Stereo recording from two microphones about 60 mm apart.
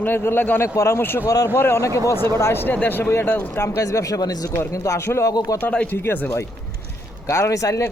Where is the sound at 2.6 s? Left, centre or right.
Left.